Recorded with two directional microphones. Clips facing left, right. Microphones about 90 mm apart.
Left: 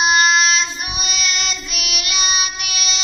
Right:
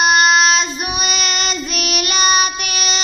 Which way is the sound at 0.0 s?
55° right (ahead or behind).